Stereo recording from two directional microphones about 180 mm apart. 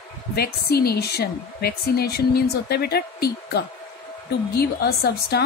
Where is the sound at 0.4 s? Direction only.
60° left (ahead or behind).